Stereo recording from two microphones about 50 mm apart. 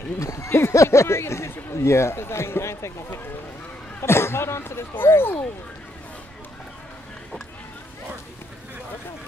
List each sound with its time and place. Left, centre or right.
0.2 s speech: left